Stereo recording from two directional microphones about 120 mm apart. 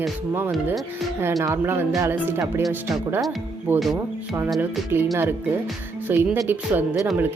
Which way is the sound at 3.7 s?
15° right (ahead or behind).